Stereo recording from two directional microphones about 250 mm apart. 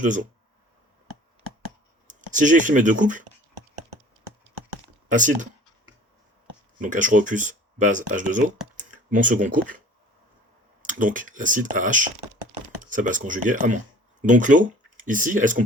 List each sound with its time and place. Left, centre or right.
0.0 s speech: right
2.0 s speech: right
5.0 s speech: right
6.8 s speech: right
10.8 s speech: right